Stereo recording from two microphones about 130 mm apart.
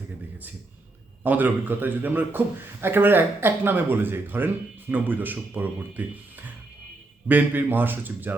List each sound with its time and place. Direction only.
1.2 s speech: 15° right (ahead or behind)
7.3 s speech: 15° right (ahead or behind)